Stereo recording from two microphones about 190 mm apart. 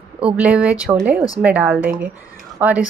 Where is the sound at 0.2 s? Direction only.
5° right (ahead or behind).